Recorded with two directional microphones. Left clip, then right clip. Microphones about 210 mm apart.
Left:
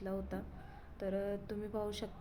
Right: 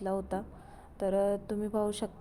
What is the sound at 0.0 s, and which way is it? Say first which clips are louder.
A woman's voice: right 9 dB; 20° right (ahead or behind).